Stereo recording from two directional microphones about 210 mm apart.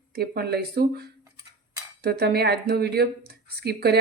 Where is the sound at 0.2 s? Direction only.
50° right (ahead or behind).